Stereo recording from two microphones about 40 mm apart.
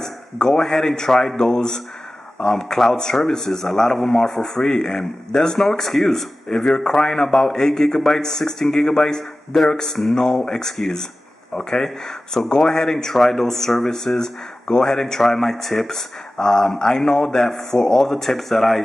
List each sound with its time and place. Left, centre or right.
0.0 s speech: centre
12.4 s speech: centre
12.9 s speech: centre